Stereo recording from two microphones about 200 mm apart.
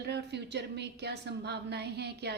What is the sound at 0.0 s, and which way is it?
A woman's voice, 60° right (ahead or behind).